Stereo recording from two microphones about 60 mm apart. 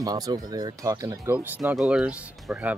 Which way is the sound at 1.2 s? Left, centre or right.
Right.